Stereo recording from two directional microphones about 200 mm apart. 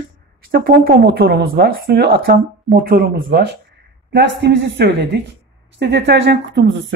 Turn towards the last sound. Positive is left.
turn(degrees=-65)  # may be behind; listen again after turning